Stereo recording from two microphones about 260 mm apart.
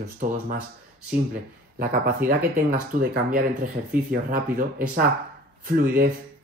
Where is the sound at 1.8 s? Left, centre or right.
Right.